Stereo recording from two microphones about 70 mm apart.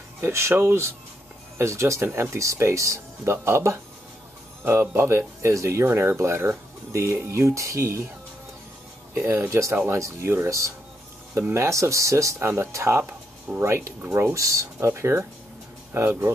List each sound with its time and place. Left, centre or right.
0.2 s speech: right
5.9 s speech: right
9.1 s speech: right
12.4 s speech: right